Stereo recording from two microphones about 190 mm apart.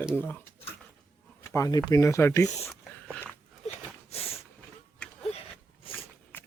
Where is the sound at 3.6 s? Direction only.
35° left (ahead or behind).